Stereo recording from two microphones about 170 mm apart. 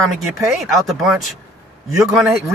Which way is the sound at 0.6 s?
Centre (ahead or behind).